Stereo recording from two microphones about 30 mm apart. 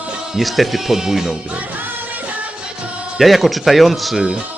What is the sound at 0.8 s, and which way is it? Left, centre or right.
Speech, centre.